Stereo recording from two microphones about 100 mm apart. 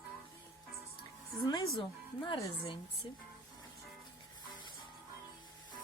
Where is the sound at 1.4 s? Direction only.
50° left (ahead or behind).